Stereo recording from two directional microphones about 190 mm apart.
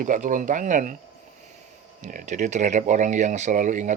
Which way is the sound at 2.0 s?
40° right (ahead or behind).